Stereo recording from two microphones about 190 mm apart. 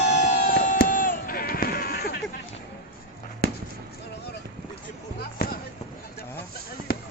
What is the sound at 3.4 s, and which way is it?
Basketball bounce, 55° right (ahead or behind).